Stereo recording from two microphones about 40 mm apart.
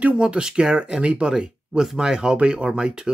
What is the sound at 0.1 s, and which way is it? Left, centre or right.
Speech, right.